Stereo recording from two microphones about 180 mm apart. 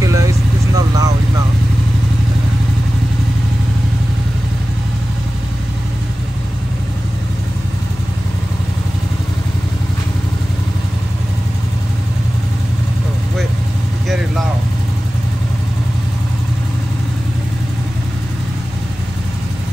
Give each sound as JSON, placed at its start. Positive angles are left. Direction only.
{"t": 0.0, "sound": "vehicle", "side_deg": -20}